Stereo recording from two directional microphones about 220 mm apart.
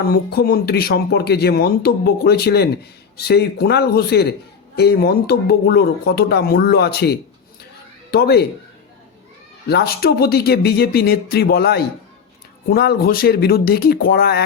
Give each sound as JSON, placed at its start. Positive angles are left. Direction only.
{"t": 0.1, "sound": "speech", "side_deg": 45}
{"t": 9.6, "sound": "speech", "side_deg": 45}